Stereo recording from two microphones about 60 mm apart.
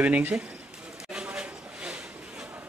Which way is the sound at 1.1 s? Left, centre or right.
Centre.